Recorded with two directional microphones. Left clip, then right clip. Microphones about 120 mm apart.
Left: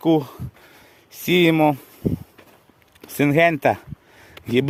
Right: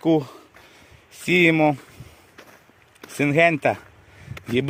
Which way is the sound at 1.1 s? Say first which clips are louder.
Left 1 dB; 50° left (ahead or behind).